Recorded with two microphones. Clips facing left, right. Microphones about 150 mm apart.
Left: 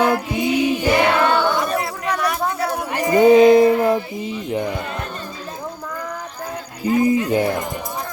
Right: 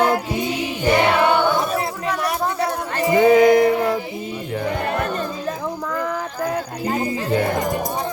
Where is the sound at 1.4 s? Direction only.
Centre (ahead or behind).